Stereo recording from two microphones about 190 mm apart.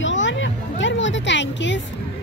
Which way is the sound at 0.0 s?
75° left (ahead or behind).